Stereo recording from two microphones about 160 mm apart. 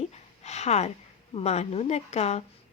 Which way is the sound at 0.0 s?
45° left (ahead or behind).